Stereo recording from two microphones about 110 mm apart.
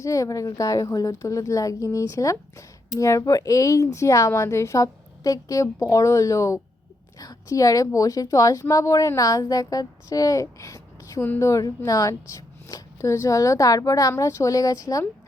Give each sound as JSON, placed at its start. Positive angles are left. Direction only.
{"t": 0.0, "sound": "a woman's voice", "side_deg": 30}